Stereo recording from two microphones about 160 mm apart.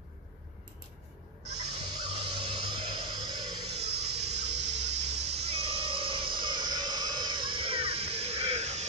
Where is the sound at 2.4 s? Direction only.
30° right (ahead or behind).